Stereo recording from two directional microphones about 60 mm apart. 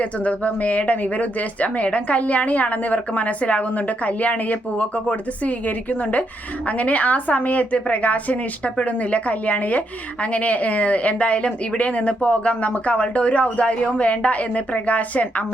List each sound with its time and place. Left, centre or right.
0.0 s a woman's voice: left